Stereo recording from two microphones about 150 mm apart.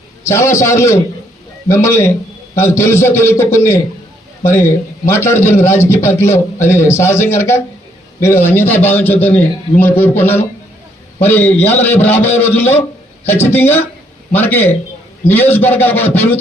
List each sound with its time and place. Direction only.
0.3 s a man's voice: 20° left (ahead or behind)